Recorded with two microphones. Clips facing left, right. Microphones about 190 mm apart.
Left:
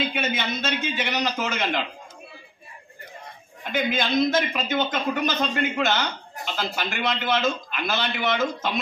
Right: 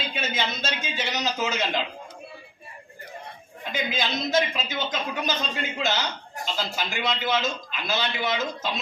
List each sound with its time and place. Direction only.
0.1 s a man's voice: 60° left (ahead or behind)
3.7 s a man's voice: 55° left (ahead or behind)